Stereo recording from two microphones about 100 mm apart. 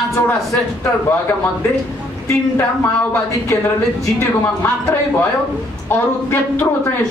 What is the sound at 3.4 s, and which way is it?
A man's voice, 25° left (ahead or behind).